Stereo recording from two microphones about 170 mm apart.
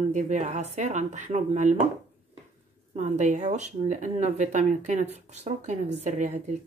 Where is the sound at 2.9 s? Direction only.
45° right (ahead or behind).